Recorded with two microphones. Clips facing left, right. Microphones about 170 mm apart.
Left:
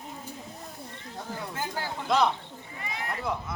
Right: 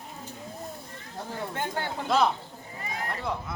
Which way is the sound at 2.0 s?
5° right (ahead or behind).